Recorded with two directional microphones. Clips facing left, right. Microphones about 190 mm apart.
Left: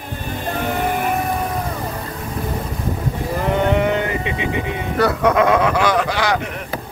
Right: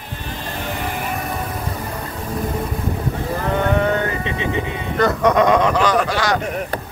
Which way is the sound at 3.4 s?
15° left (ahead or behind).